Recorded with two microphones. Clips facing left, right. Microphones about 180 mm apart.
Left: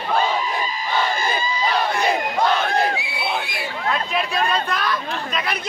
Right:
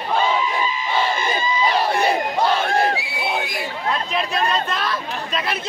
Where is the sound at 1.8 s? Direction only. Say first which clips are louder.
Right 2 dB; 35° right (ahead or behind).